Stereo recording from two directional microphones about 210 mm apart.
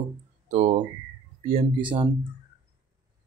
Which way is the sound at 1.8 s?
25° right (ahead or behind).